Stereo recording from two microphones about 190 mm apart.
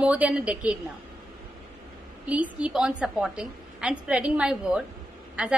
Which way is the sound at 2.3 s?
5° right (ahead or behind).